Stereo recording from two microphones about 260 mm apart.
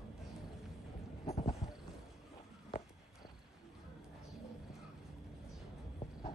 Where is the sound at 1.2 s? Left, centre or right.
Left.